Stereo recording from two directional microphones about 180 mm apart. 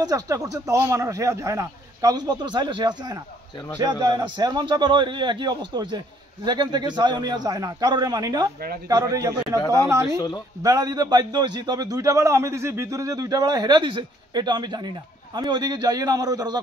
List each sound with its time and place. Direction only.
0.0 s a man's voice: 20° right (ahead or behind)
10.0 s speech: 25° left (ahead or behind)
10.6 s a man's voice: 20° right (ahead or behind)